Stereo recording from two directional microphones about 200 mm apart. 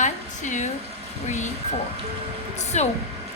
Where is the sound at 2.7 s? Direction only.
35° left (ahead or behind).